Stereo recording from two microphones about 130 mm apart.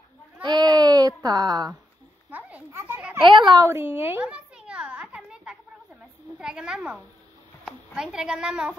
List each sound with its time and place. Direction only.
0.4 s baby cry: 35° right (ahead or behind)
2.3 s children playing: 15° right (ahead or behind)
3.2 s a child's voice: 35° right (ahead or behind)
3.6 s a sound: 20° right (ahead or behind)
6.3 s a woman's voice: 5° right (ahead or behind)